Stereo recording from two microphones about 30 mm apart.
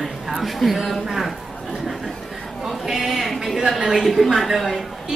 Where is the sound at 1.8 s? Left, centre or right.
Centre.